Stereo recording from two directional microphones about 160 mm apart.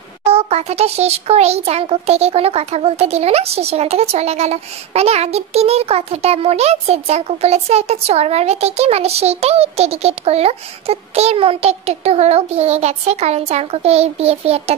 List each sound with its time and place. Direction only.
0.2 s a child's voice: 40° right (ahead or behind)